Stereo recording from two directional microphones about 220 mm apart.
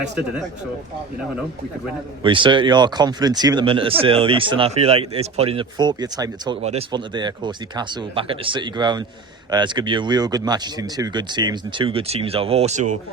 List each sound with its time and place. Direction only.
2.2 s speech: 20° right (ahead or behind)